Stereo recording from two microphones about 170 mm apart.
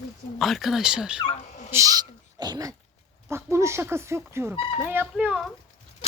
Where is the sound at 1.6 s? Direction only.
20° right (ahead or behind).